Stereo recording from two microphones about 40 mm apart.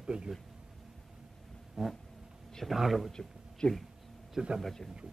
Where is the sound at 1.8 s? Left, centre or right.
Centre.